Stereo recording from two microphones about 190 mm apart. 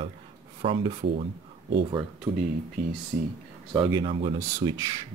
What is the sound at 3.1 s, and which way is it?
Speech, 40° right (ahead or behind).